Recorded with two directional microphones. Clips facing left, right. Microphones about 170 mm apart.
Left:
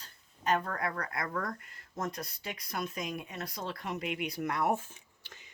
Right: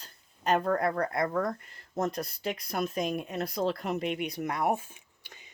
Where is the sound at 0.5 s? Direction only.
35° right (ahead or behind).